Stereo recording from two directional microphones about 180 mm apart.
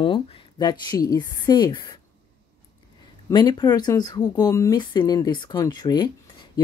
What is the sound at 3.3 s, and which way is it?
Speech, 25° left (ahead or behind).